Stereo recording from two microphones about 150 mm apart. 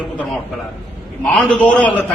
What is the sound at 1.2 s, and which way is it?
Speech, 10° left (ahead or behind).